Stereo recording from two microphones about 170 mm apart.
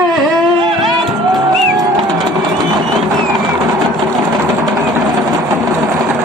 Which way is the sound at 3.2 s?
Centre (ahead or behind).